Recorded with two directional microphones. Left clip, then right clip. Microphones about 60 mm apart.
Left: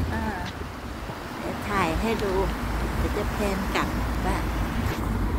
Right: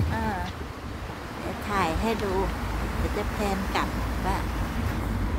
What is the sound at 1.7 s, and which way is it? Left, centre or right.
Vehicle, centre.